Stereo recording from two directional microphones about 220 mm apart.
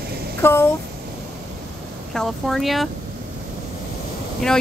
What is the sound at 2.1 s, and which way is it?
Speech, centre (ahead or behind).